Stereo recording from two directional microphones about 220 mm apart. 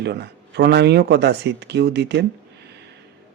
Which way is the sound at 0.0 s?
50° right (ahead or behind).